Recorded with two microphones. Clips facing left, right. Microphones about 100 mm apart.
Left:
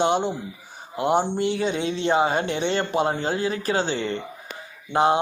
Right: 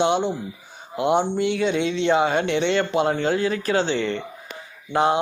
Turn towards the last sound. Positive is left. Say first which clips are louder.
# even
turn(degrees=30)  # may be behind; listen again after turning